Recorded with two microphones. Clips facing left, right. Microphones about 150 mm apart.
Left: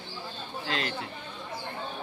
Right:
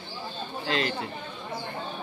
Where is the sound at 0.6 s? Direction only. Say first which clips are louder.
Right 5 dB; centre (ahead or behind).